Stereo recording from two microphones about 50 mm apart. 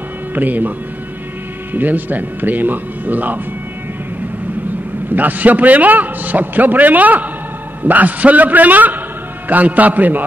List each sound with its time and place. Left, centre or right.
0.3 s a man's voice: right
5.1 s a man's voice: right